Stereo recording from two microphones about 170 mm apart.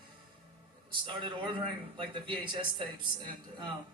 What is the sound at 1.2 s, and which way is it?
Speech, 30° right (ahead or behind).